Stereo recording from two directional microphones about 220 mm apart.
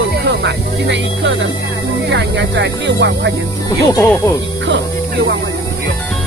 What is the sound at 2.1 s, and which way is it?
Speech, 55° right (ahead or behind).